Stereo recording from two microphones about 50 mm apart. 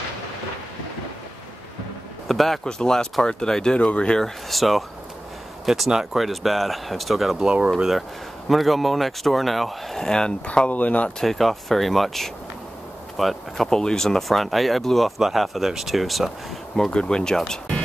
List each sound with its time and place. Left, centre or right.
2.2 s speech: centre
2.6 s speech: centre
4.2 s speech: centre; by 11.1 s left
11.1 s speech: centre
16.7 s speech: centre